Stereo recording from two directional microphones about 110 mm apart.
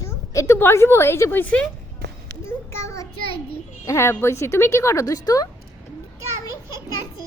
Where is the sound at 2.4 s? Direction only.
25° left (ahead or behind).